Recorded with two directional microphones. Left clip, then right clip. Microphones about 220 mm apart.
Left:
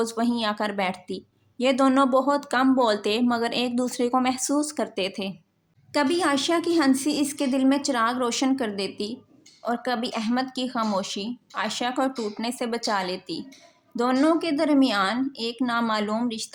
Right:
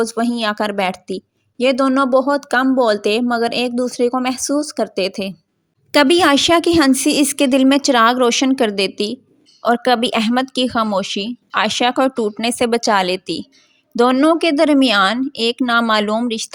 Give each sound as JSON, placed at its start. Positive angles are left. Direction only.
{"t": 0.0, "sound": "a woman's voice", "side_deg": -25}